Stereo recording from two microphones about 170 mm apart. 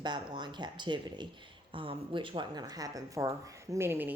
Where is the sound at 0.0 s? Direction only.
25° right (ahead or behind).